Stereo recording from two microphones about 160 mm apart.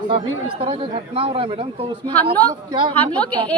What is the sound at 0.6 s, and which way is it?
Speech, 35° right (ahead or behind).